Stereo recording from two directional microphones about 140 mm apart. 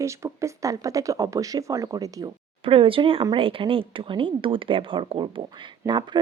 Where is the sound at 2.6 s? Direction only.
40° right (ahead or behind).